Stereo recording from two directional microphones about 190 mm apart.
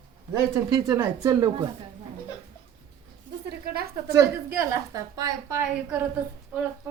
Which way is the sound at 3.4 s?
55° right (ahead or behind).